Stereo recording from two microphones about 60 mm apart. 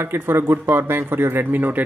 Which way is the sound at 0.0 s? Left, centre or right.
Right.